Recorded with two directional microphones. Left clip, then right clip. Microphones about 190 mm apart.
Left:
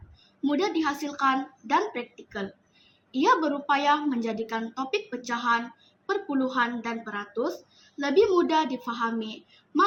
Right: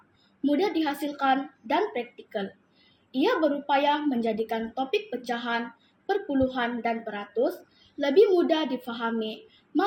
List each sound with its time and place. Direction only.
0.4 s a woman's voice: 15° left (ahead or behind)